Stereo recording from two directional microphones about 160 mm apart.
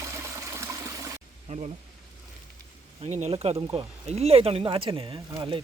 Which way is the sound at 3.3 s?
25° right (ahead or behind).